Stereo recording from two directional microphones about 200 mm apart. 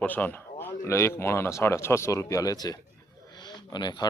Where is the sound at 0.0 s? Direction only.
10° left (ahead or behind).